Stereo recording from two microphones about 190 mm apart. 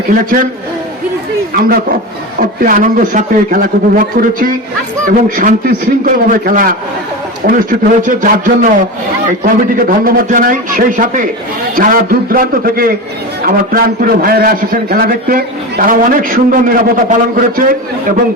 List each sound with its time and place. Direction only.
0.1 s a man's voice: 45° right (ahead or behind)
1.5 s a man's voice: 50° right (ahead or behind)
9.7 s a man's voice: 50° right (ahead or behind)